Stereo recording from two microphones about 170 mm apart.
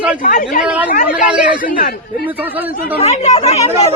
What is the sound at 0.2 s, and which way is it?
Speech, 50° left (ahead or behind).